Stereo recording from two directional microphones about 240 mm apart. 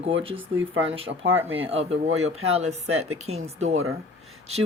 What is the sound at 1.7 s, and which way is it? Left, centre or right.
Speech, right.